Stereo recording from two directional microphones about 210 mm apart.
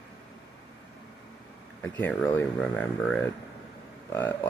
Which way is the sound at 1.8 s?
5° left (ahead or behind).